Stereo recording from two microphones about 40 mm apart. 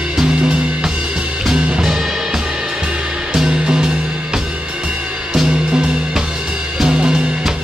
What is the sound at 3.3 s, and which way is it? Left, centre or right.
Music, right.